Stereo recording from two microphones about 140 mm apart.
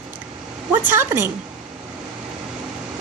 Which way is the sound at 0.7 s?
15° right (ahead or behind).